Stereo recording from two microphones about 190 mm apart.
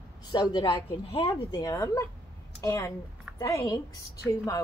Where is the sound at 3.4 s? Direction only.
20° left (ahead or behind).